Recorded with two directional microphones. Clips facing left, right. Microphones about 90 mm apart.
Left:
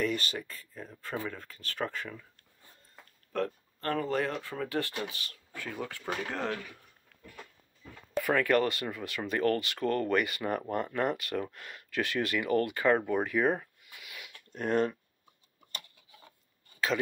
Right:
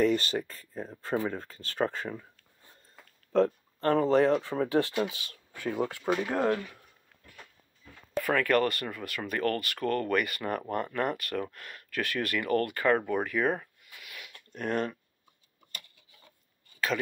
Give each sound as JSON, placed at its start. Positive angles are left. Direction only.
{"t": 0.0, "sound": "speech", "side_deg": -35}
{"t": 3.3, "sound": "speech", "side_deg": -25}
{"t": 8.2, "sound": "speech", "side_deg": 15}